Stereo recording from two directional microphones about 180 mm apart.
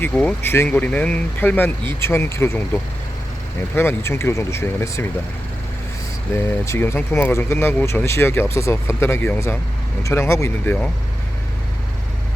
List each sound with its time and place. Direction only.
0.0 s speech: 5° left (ahead or behind)
6.3 s speech: 15° left (ahead or behind)